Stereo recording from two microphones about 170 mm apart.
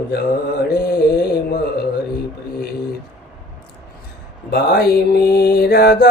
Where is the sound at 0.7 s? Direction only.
65° left (ahead or behind).